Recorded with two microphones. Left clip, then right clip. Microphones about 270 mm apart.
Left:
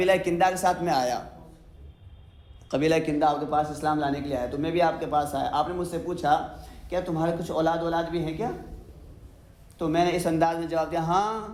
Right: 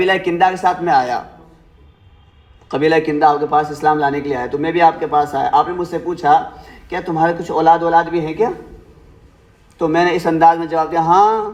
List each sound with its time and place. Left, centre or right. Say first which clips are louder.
0.0 s a man's voice: right 8 dB; centre
2.6 s speech: right 9 dB; centre
9.7 s a man's voice: right 10 dB; centre